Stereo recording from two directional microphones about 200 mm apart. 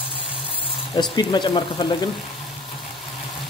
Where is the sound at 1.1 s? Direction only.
20° left (ahead or behind).